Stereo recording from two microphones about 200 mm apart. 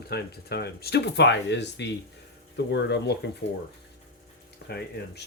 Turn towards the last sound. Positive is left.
turn(degrees=55)  # may be behind; listen again after turning